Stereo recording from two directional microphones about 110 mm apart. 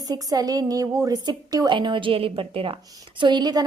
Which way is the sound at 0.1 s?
35° right (ahead or behind).